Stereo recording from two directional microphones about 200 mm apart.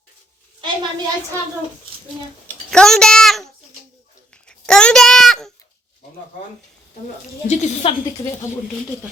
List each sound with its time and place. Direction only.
0.6 s a woman's voice: 15° right (ahead or behind)
2.5 s a child's voice: 5° left (ahead or behind)
4.4 s a sound: 5° left (ahead or behind)
7.4 s a woman's voice: 35° left (ahead or behind)